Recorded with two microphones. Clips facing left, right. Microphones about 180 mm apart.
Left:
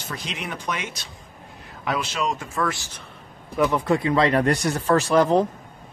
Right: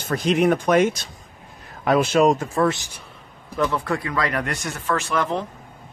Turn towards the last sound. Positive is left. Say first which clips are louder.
# left 6 dB
turn(degrees=35)  # may be behind; listen again after turning